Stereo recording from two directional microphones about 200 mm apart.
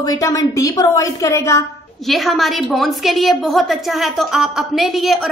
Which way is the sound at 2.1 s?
Centre (ahead or behind).